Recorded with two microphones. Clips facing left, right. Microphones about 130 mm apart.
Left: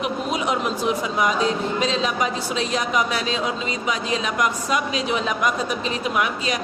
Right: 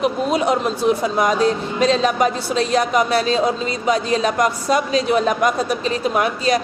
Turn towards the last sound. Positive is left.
turn(degrees=-35)  # may be behind; listen again after turning